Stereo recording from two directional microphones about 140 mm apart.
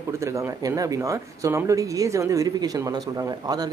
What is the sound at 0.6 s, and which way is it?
Speech, 25° right (ahead or behind).